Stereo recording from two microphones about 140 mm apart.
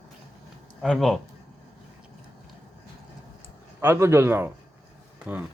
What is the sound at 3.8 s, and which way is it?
Speech, 15° right (ahead or behind).